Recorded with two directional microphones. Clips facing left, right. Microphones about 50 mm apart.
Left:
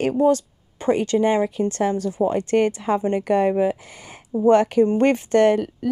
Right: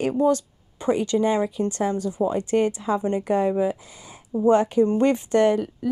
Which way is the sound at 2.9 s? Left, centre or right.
Left.